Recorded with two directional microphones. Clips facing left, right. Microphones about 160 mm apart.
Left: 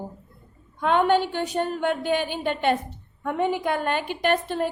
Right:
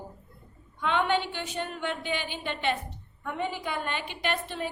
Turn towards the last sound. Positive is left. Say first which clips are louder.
# left 8 dB
turn(degrees=50)  # may be behind; listen again after turning